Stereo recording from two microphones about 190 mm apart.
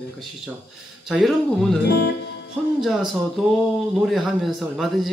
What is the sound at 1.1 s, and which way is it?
Speech, centre (ahead or behind).